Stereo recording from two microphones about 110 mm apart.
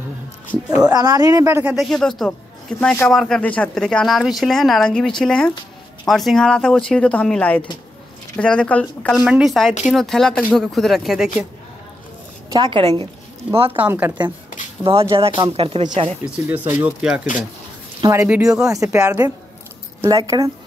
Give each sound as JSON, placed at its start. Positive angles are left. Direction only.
{"t": 0.8, "sound": "speech", "side_deg": -35}
{"t": 1.8, "sound": "speech", "side_deg": 0}
{"t": 9.1, "sound": "speech", "side_deg": -5}
{"t": 12.4, "sound": "a woman's voice", "side_deg": -40}
{"t": 12.8, "sound": "speech", "side_deg": -55}
{"t": 13.7, "sound": "speech", "side_deg": -15}
{"t": 14.8, "sound": "speech", "side_deg": -55}
{"t": 16.3, "sound": "speech", "side_deg": -15}
{"t": 18.0, "sound": "speech", "side_deg": -25}
{"t": 18.3, "sound": "speech", "side_deg": -5}
{"t": 18.7, "sound": "speech", "side_deg": -30}
{"t": 20.1, "sound": "speech", "side_deg": -35}